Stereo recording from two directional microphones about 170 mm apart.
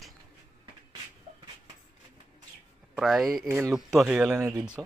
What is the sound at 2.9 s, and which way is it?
Speech, centre (ahead or behind).